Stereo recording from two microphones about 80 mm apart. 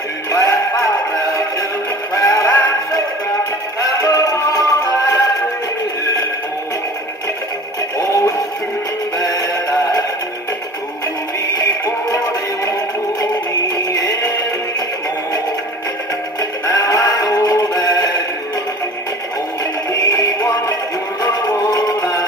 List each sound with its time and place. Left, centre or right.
0.3 s music: left
2.1 s synthetic singing: left
3.8 s music: left
8.0 s synthetic singing: left
9.3 s music: left
13.9 s music: left
16.3 s music: left
19.9 s music: left